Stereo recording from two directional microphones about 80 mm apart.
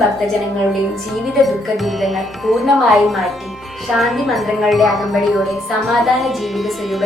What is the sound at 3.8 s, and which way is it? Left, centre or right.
A woman's voice, centre.